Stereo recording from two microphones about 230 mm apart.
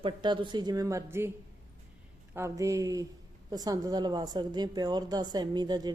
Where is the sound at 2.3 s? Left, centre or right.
Centre.